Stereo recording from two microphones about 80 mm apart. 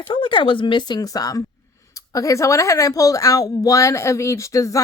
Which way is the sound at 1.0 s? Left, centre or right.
Left.